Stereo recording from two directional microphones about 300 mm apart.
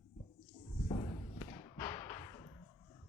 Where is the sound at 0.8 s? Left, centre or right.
Left.